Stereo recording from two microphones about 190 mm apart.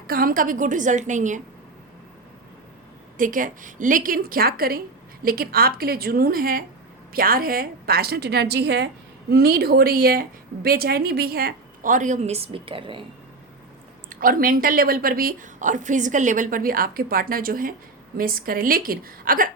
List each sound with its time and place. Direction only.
0.1 s a woman's voice: 50° right (ahead or behind)
3.2 s a woman's voice: 45° right (ahead or behind); by 13.1 s 25° right (ahead or behind)
14.1 s a woman's voice: 50° right (ahead or behind)